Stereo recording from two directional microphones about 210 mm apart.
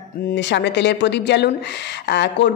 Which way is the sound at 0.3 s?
55° left (ahead or behind).